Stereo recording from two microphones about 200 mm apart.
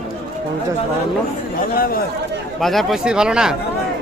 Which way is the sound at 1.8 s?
45° left (ahead or behind).